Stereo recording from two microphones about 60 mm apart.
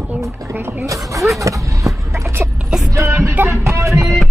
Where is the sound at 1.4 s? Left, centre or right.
Right.